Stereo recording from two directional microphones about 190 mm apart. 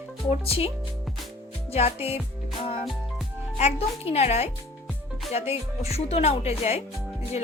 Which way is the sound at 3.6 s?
35° left (ahead or behind).